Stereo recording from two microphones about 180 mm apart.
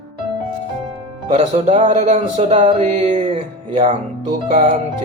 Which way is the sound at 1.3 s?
35° right (ahead or behind).